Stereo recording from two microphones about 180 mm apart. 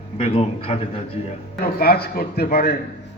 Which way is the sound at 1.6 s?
60° left (ahead or behind).